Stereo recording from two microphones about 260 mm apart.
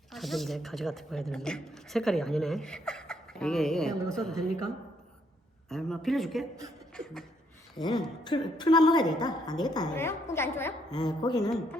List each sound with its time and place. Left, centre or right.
0.1 s a woman's voice: centre
5.6 s a woman's voice: centre
7.8 s a woman's voice: centre